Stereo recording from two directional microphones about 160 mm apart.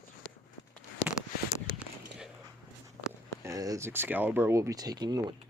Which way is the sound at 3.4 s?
20° right (ahead or behind).